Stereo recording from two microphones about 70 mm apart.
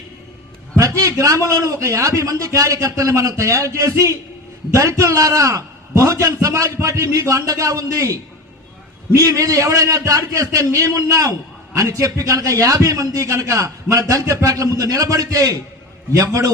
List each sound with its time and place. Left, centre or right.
0.8 s a man's voice: right